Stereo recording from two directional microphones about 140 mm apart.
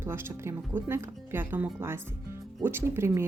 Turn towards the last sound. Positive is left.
turn(degrees=-20)  # may be behind; listen again after turning